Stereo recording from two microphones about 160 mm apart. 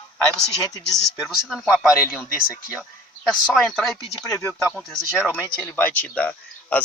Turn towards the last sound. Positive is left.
turn(degrees=10)  # may be behind; listen again after turning